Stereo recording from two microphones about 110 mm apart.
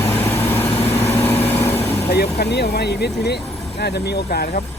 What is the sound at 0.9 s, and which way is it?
Vehicle, 25° left (ahead or behind).